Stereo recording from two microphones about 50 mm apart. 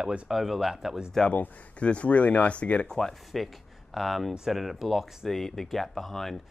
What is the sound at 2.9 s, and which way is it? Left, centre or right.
Speech, centre.